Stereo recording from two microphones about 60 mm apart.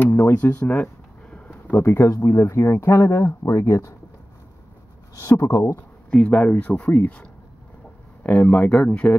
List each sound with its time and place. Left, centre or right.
0.3 s speech: left
1.7 s speech: left
5.1 s speech: left
6.0 s speech: left